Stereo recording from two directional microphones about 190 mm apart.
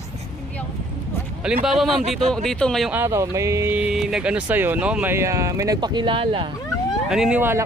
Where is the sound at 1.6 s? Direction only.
Centre (ahead or behind).